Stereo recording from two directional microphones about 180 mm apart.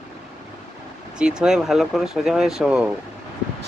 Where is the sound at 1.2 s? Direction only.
5° right (ahead or behind).